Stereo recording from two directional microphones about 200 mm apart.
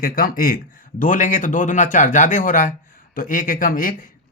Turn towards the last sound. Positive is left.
turn(degrees=45)  # may be behind; listen again after turning